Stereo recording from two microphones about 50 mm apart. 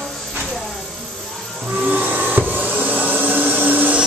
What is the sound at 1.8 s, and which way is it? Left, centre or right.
Vacuum cleaner, right.